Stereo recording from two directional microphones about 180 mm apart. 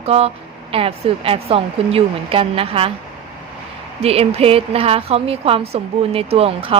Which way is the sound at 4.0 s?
35° right (ahead or behind).